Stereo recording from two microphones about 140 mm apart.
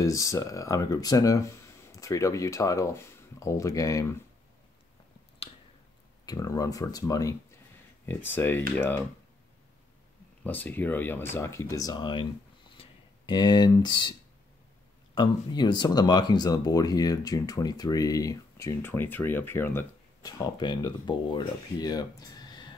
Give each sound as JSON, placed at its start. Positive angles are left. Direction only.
{"t": 0.0, "sound": "speech", "side_deg": 25}
{"t": 6.2, "sound": "speech", "side_deg": 25}
{"t": 8.0, "sound": "speech", "side_deg": 15}
{"t": 10.4, "sound": "speech", "side_deg": 10}
{"t": 15.1, "sound": "speech", "side_deg": 35}
{"t": 20.2, "sound": "speech", "side_deg": 30}